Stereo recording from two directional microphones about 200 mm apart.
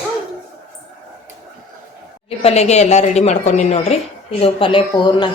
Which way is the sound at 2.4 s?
30° left (ahead or behind).